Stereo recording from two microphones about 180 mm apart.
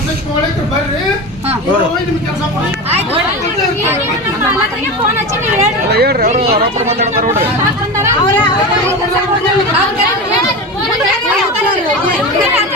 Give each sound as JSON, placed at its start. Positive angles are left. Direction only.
{"t": 5.9, "sound": "speech", "side_deg": -60}
{"t": 6.2, "sound": "speech", "side_deg": -40}